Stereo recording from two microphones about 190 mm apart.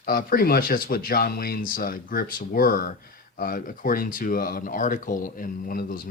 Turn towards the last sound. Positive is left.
turn(degrees=50)  # may be behind; listen again after turning